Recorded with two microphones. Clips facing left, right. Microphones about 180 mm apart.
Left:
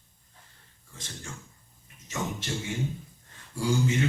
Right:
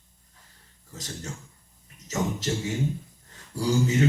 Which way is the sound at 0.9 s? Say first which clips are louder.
Right 6 dB; 40° right (ahead or behind).